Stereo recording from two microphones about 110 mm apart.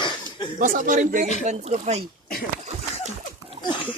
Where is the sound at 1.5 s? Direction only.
85° right.